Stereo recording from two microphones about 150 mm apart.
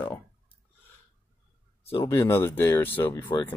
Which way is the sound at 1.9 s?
15° left (ahead or behind).